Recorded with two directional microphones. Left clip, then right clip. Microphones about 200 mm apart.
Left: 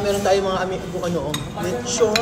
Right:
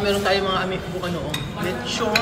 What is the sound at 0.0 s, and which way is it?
Speech, 25° left (ahead or behind).